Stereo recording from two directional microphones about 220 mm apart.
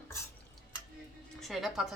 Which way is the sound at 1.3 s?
Centre (ahead or behind).